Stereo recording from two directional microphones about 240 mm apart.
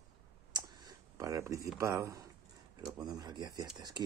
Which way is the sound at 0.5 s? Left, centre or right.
Centre.